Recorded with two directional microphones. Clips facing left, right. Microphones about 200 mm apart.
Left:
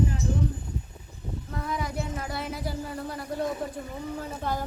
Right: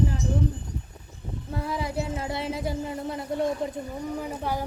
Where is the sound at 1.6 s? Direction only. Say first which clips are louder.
Right 2 dB; 30° right (ahead or behind).